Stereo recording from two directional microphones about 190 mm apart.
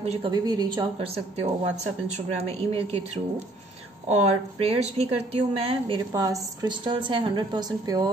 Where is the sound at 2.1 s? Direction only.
30° right (ahead or behind).